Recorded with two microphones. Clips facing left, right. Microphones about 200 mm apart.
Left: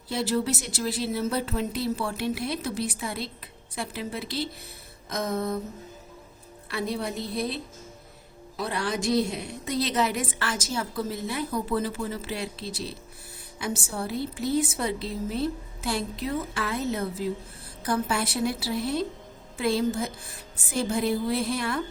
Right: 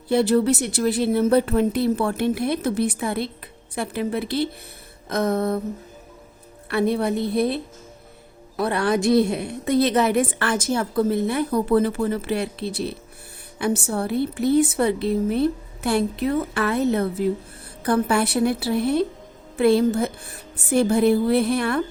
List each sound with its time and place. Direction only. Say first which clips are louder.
0.1 s a woman's voice: right 9 dB; 60° right (ahead or behind)
6.7 s a woman's voice: right 9 dB; 60° right (ahead or behind)